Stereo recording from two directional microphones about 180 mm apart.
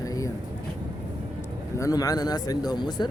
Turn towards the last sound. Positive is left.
turn(degrees=25)  # may be behind; listen again after turning